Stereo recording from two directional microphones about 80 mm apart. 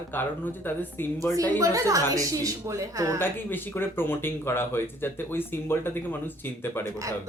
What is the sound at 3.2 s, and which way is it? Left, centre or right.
Speech, left.